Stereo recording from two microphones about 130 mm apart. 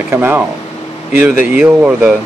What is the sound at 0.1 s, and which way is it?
Speech, 15° right (ahead or behind).